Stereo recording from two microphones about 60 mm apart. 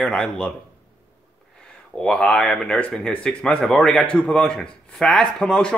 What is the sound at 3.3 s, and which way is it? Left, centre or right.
Speech, centre.